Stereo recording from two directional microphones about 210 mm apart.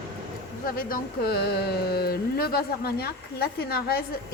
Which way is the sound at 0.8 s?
45° left (ahead or behind).